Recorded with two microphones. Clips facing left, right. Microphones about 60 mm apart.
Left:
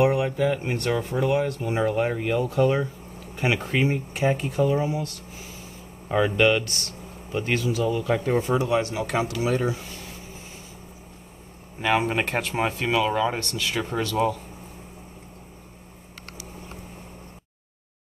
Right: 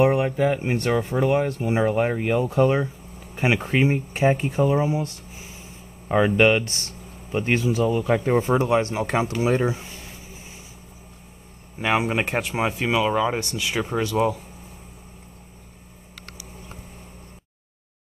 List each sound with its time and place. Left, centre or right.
0.0 s speech: right
11.8 s speech: centre